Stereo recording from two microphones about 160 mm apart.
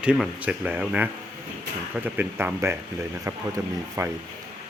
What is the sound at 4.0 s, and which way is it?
Speech, 15° right (ahead or behind).